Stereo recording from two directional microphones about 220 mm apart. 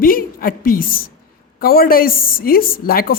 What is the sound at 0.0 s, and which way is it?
A woman's voice, 40° left (ahead or behind).